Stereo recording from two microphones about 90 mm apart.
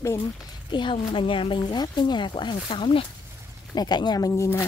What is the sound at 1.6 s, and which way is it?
Speech, 50° left (ahead or behind).